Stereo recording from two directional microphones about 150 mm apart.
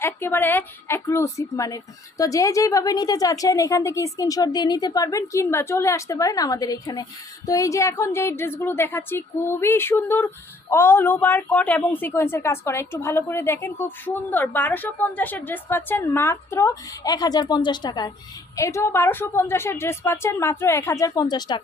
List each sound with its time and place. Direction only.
0.0 s a woman's voice: 15° left (ahead or behind)